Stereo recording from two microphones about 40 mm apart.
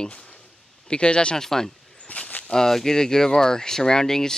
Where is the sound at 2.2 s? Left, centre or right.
Left.